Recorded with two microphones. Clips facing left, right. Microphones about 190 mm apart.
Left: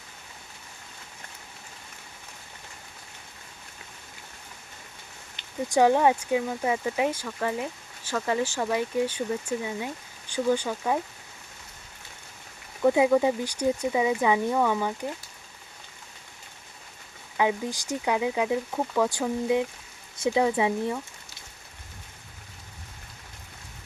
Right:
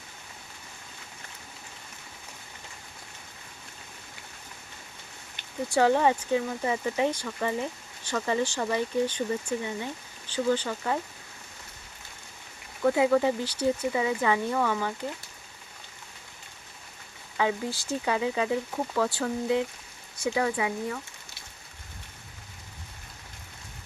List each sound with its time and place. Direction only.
5.6 s speech: 15° left (ahead or behind)
12.8 s speech: 15° left (ahead or behind)
17.3 s speech: 15° left (ahead or behind)